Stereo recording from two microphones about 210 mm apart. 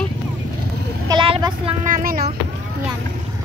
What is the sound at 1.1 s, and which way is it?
Speech, 20° right (ahead or behind).